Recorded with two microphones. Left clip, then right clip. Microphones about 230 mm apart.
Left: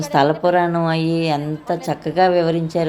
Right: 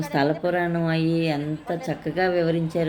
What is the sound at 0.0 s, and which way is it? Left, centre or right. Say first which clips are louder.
Speech: left 7 dB; centre.